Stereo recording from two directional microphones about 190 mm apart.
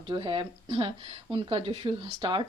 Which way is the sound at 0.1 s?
25° right (ahead or behind).